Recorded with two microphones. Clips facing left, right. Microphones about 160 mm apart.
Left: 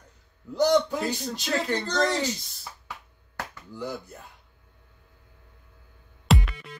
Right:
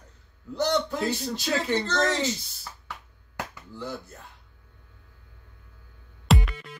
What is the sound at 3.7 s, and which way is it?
Speech, 15° left (ahead or behind).